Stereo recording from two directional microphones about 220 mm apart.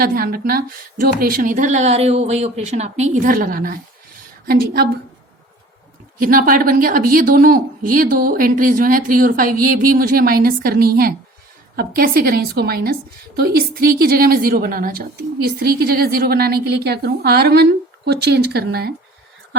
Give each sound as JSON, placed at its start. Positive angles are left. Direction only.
{"t": 0.0, "sound": "a woman's voice", "side_deg": -40}
{"t": 6.1, "sound": "a woman's voice", "side_deg": -40}